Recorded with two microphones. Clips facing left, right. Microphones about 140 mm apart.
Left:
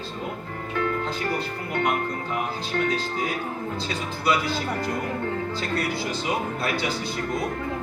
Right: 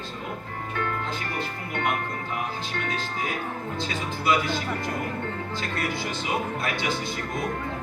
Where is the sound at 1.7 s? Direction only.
40° left (ahead or behind).